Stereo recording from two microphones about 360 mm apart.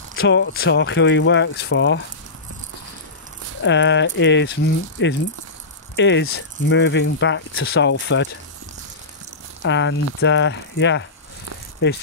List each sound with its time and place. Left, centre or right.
0.1 s speech: left
3.6 s speech: left
9.6 s speech: left